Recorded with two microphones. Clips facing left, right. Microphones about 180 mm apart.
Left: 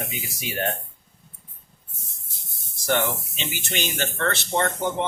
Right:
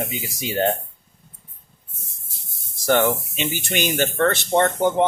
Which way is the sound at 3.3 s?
45° right (ahead or behind).